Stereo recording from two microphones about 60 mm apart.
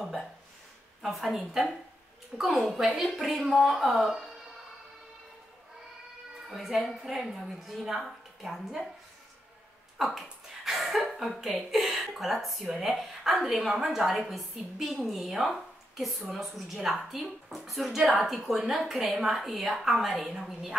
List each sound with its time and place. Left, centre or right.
0.0 s a sound: centre
1.0 s a woman's voice: centre
6.5 s a woman's voice: centre
9.9 s a woman's voice: centre